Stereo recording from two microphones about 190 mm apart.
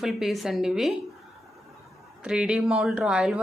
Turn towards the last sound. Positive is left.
turn(degrees=-5)  # may be behind; listen again after turning